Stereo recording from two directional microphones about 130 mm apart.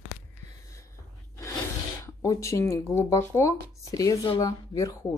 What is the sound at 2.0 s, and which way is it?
Speech, 20° left (ahead or behind).